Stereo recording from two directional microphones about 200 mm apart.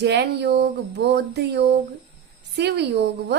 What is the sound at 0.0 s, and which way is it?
A woman's voice, 60° right (ahead or behind).